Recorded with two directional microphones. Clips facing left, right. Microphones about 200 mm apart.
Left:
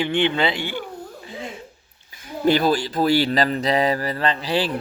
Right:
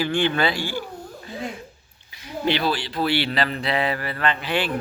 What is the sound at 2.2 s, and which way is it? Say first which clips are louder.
Speech: left 5 dB; 45° left (ahead or behind).